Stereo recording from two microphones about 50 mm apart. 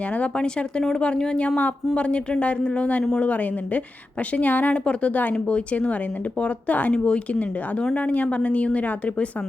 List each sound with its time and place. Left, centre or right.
0.2 s a woman's voice: centre